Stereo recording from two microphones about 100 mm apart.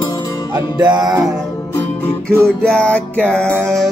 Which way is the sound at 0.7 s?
45° right (ahead or behind).